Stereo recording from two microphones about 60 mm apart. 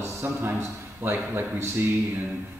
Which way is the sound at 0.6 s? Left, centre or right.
Right.